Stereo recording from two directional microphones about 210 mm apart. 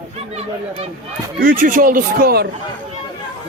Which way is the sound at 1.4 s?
40° right (ahead or behind).